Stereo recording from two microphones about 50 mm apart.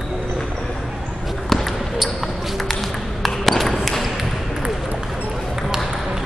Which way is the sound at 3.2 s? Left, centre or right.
Centre.